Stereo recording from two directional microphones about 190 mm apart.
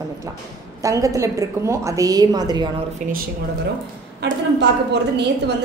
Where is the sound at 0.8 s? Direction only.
15° right (ahead or behind).